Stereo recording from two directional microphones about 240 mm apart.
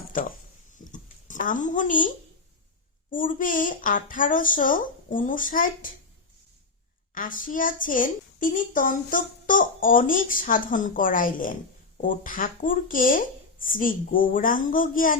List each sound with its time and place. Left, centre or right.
0.1 s a sound: left
3.1 s a woman's voice: left
7.1 s a woman's voice: left